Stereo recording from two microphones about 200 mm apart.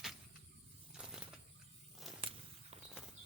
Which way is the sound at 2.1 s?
Centre (ahead or behind).